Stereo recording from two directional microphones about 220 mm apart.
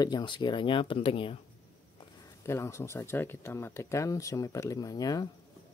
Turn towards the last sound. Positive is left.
turn(degrees=15)  # may be behind; listen again after turning